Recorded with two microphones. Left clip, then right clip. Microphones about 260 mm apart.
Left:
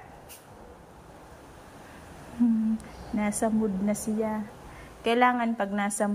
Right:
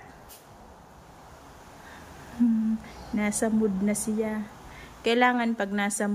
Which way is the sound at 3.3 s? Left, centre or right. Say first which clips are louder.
Right 2 dB; right.